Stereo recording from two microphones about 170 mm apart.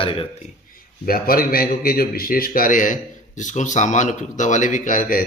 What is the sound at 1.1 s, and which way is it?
A man's voice, 60° left (ahead or behind).